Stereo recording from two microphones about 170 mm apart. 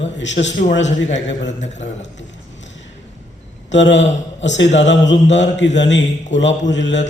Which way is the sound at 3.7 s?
90° left.